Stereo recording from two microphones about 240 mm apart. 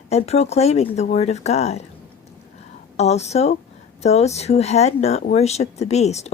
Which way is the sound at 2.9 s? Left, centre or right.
Left.